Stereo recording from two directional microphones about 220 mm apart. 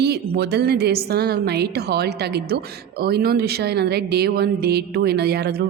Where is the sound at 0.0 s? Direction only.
45° right (ahead or behind).